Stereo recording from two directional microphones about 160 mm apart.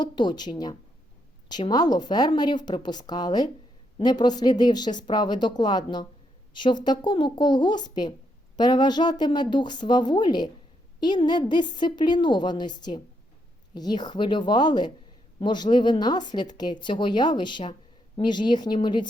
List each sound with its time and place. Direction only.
0.0 s a woman's voice: 25° left (ahead or behind)